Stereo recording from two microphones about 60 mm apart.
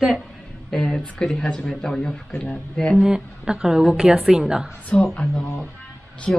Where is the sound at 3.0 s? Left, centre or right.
Centre.